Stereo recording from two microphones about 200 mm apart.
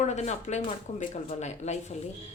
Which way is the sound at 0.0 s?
35° left (ahead or behind).